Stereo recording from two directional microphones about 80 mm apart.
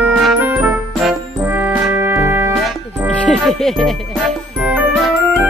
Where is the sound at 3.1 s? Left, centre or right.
Centre.